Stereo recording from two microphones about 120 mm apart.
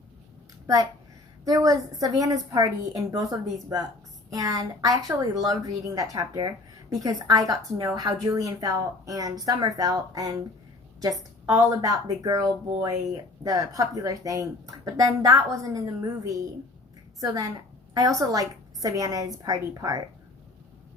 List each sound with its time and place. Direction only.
1.5 s a woman's voice: 30° right (ahead or behind)
11.5 s a woman's voice: 30° right (ahead or behind)